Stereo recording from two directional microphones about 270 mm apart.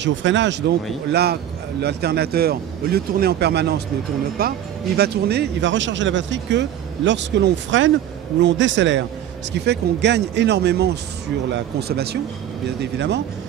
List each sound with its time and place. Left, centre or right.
0.0 s speech: right